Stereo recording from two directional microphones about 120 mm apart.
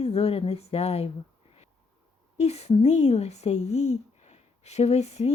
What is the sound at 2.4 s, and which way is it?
Speech, 65° left (ahead or behind).